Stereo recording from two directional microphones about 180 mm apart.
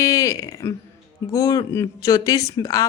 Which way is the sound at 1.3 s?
20° left (ahead or behind).